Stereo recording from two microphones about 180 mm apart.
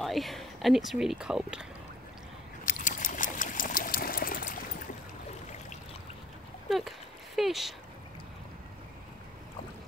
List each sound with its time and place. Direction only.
0.0 s speech: centre (ahead or behind)
2.6 s water: 45° left (ahead or behind)
7.3 s a sound: centre (ahead or behind)